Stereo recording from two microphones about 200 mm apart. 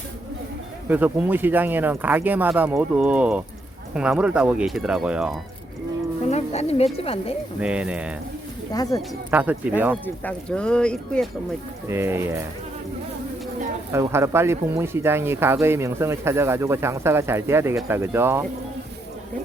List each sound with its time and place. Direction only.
0.9 s speech: 10° right (ahead or behind)
6.3 s speech: 30° left (ahead or behind)
7.6 s speech: 5° right (ahead or behind)
8.7 s speech: 20° left (ahead or behind)
9.3 s speech: 10° right (ahead or behind)
10.2 s speech: 5° left (ahead or behind)
11.9 s speech: 10° right (ahead or behind)
13.9 s speech: 10° right (ahead or behind)